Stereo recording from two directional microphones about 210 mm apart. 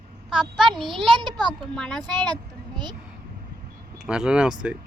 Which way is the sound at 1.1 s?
20° right (ahead or behind).